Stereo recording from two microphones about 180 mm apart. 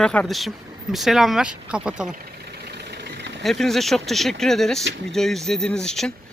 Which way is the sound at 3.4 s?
Centre (ahead or behind).